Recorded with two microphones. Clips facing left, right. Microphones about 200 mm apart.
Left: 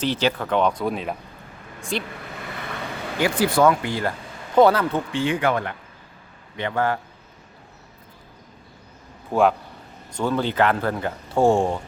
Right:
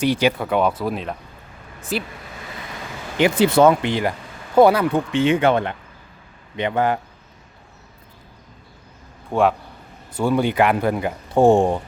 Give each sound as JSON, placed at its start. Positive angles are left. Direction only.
{"t": 0.0, "sound": "speech", "side_deg": -15}
{"t": 3.2, "sound": "speech", "side_deg": -20}
{"t": 9.3, "sound": "speech", "side_deg": 0}